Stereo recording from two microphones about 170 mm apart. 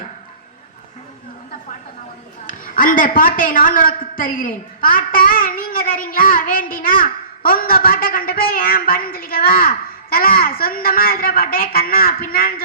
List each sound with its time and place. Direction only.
2.5 s a man's voice: 55° left (ahead or behind)